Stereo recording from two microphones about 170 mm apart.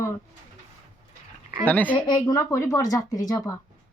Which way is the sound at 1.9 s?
25° left (ahead or behind).